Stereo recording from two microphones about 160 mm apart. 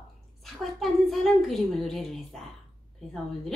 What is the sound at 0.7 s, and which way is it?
A woman's voice, centre (ahead or behind).